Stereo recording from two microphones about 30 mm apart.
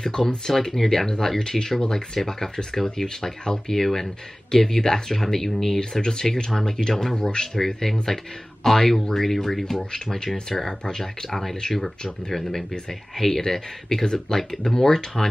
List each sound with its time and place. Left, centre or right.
0.0 s speech: left
0.5 s speech: centre
1.8 s speech: left
5.8 s speech: left
6.9 s speech: centre
7.2 s speech: left
7.5 s speech: centre
10.1 s speech: left
11.6 s speech: left
12.3 s speech: centre